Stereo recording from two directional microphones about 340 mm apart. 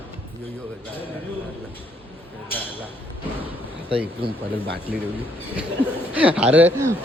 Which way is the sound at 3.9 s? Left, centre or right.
Centre.